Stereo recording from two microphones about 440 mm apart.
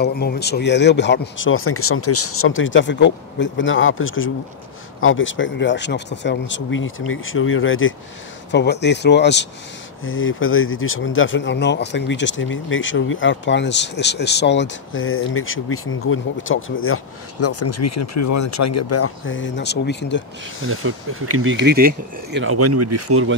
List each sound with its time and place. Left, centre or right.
0.0 s speech: left
20.8 s speech: right